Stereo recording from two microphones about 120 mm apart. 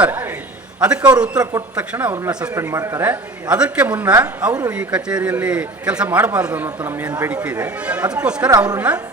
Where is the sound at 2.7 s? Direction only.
25° right (ahead or behind).